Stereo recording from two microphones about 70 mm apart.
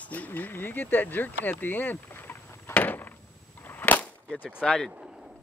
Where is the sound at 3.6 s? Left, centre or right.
Left.